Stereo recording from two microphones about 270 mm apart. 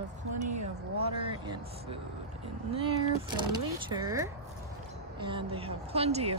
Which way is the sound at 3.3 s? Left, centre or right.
Centre.